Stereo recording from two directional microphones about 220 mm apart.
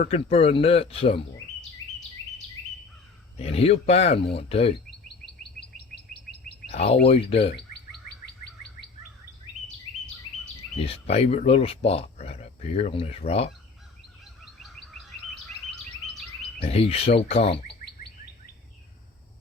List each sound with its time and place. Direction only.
0.0 s speech: 25° left (ahead or behind)
3.3 s speech: 25° left (ahead or behind)
6.7 s speech: 30° left (ahead or behind)
9.6 s bird: 35° left (ahead or behind)
10.8 s speech: 25° left (ahead or behind)
15.7 s bird: centre (ahead or behind)
16.6 s speech: 25° left (ahead or behind)